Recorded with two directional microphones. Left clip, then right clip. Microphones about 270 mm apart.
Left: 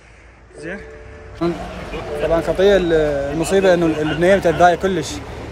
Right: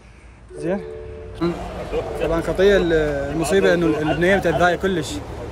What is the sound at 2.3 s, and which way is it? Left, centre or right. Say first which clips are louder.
Speech: left 2 dB; centre.